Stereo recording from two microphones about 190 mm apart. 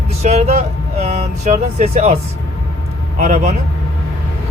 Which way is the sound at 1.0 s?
35° right (ahead or behind).